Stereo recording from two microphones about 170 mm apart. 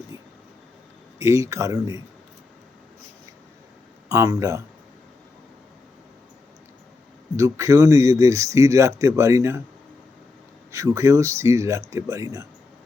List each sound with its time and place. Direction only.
1.2 s speech: 15° right (ahead or behind)
4.1 s speech: 20° right (ahead or behind)
7.3 s speech: 15° right (ahead or behind)
10.7 s speech: 20° right (ahead or behind)